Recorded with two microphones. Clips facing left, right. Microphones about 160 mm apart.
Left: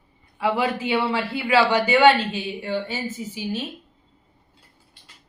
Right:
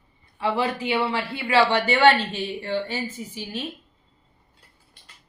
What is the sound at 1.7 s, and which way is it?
A woman's voice, 5° left (ahead or behind).